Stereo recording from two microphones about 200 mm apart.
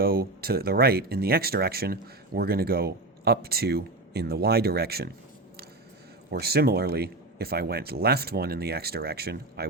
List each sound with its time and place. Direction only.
0.0 s speech: 50° right (ahead or behind)
6.3 s speech: 50° right (ahead or behind)